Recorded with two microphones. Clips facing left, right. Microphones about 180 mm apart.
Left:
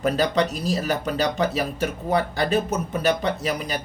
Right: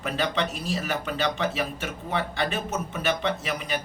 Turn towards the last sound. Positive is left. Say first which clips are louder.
# left 3 dB
turn(degrees=40)  # may be behind; listen again after turning